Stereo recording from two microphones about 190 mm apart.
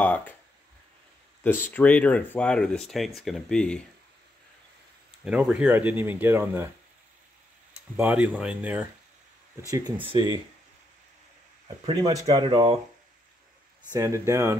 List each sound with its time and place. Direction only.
0.0 s a sound: 10° left (ahead or behind)
1.4 s speech: 10° left (ahead or behind)
5.2 s speech: 5° right (ahead or behind)
7.9 s speech: 10° right (ahead or behind)
9.7 s speech: 15° right (ahead or behind)
11.8 s speech: 25° right (ahead or behind)
13.9 s speech: 15° right (ahead or behind)